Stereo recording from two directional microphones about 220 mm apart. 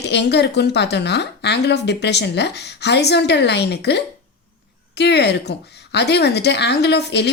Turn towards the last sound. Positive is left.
turn(degrees=50)  # may be behind; listen again after turning